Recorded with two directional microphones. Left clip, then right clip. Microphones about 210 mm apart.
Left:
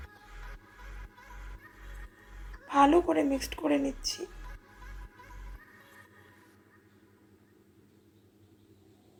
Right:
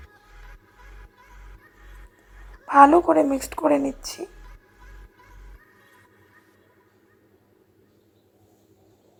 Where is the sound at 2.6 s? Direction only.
20° right (ahead or behind).